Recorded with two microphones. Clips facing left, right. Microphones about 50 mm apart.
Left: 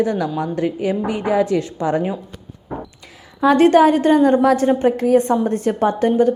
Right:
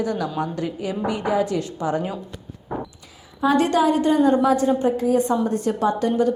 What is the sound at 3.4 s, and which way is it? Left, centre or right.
A woman's voice, left.